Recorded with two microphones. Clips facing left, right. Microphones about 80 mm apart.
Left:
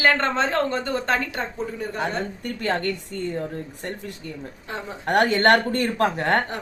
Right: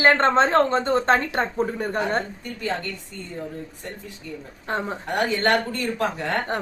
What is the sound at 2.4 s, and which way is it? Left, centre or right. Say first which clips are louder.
Speech: left 4 dB; left.